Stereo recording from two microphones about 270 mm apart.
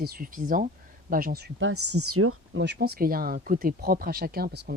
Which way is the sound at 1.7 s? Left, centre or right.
Right.